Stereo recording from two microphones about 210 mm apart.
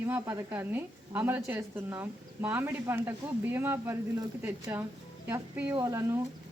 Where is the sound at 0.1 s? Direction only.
10° right (ahead or behind).